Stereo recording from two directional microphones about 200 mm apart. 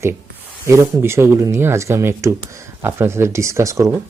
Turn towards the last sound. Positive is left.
turn(degrees=-15)  # may be behind; listen again after turning